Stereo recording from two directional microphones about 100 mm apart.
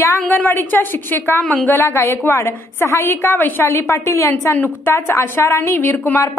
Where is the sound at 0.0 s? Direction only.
25° left (ahead or behind).